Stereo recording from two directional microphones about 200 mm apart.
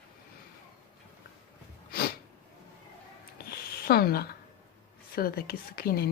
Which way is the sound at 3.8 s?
50° left (ahead or behind).